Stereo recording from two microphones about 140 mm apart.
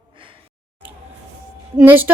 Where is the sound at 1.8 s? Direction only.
15° right (ahead or behind).